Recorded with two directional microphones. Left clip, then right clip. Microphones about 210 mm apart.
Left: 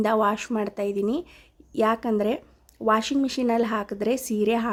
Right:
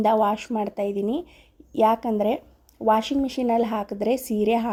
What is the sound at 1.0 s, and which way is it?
Speech, 40° left (ahead or behind).